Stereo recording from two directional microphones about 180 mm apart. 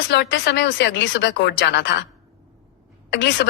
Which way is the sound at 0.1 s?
75° left (ahead or behind).